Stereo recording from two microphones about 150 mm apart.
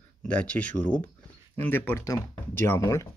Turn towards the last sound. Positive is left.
turn(degrees=20)  # may be behind; listen again after turning